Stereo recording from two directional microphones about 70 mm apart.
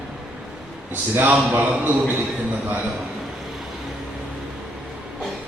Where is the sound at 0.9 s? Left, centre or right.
Right.